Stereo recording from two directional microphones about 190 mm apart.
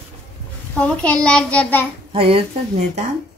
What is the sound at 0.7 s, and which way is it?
A child's voice, 5° left (ahead or behind).